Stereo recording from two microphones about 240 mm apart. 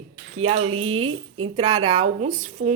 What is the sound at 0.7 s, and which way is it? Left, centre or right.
Speech, right.